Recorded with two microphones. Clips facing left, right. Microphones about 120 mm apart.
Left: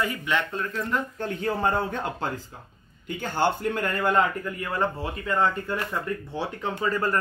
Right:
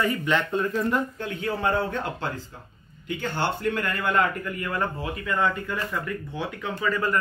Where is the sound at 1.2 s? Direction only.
40° left (ahead or behind).